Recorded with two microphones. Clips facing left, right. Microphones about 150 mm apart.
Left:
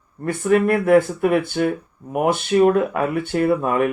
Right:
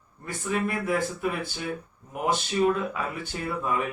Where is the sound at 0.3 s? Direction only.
60° left (ahead or behind).